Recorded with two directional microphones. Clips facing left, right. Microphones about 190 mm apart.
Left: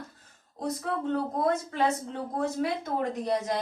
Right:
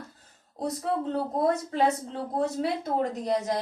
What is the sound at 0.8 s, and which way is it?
A woman's voice, 30° right (ahead or behind).